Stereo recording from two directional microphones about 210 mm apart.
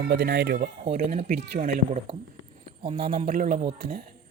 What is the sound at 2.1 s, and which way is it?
A man's voice, 20° right (ahead or behind).